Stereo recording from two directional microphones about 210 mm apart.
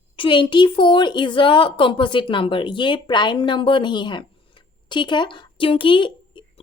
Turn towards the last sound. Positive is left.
turn(degrees=25)  # may be behind; listen again after turning